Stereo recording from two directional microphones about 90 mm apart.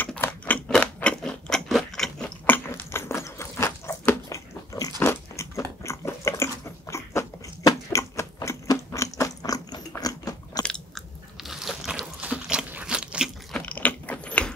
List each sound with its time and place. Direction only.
0.0 s a sound: 15° left (ahead or behind)
0.7 s crunch: 10° left (ahead or behind)
2.7 s biting: 30° left (ahead or behind)
4.7 s biting: 40° left (ahead or behind)
5.0 s biting: 30° left (ahead or behind)
7.9 s chewing: 35° left (ahead or behind)
10.6 s chewing: 10° left (ahead or behind)
11.4 s biting: 5° right (ahead or behind)
12.2 s crunch: 10° right (ahead or behind)
13.5 s ratchet: 10° left (ahead or behind)